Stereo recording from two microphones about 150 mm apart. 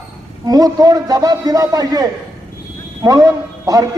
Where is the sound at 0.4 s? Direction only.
25° right (ahead or behind).